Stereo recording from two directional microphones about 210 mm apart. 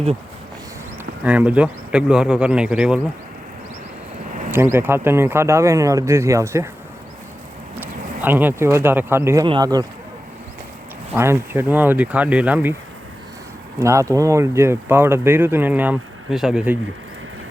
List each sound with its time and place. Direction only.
1.2 s speech: 5° right (ahead or behind)
4.5 s speech: 10° right (ahead or behind)
7.8 s speech: 10° right (ahead or behind)
11.1 s speech: 10° right (ahead or behind)
13.7 s speech: 15° right (ahead or behind)